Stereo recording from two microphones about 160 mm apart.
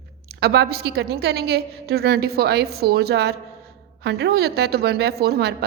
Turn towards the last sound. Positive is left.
turn(degrees=-90)